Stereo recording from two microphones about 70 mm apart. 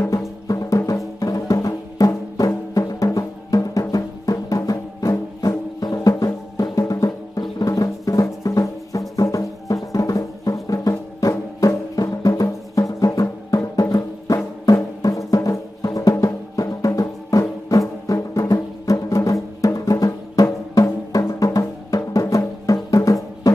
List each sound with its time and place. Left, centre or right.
0.5 s music: left
7.6 s music: left
21.5 s music: left
23.5 s drum: left